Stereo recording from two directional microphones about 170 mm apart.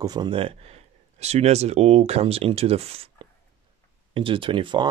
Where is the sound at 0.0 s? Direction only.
25° right (ahead or behind).